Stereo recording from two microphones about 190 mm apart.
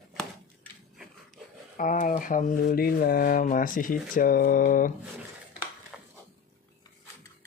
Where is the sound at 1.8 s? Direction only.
45° left (ahead or behind).